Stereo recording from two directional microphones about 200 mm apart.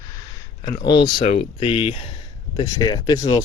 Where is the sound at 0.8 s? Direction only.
20° left (ahead or behind).